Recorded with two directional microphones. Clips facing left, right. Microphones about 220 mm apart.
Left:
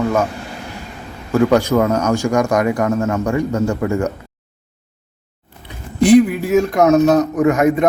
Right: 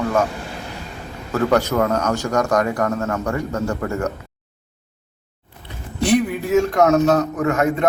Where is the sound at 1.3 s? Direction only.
10° left (ahead or behind).